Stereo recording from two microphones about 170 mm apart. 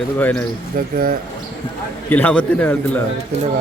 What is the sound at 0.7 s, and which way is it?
Speech, 55° right (ahead or behind).